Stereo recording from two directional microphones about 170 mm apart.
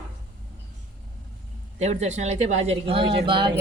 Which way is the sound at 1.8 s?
40° right (ahead or behind).